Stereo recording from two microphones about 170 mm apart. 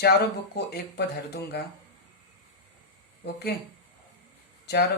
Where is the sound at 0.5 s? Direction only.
75° left (ahead or behind).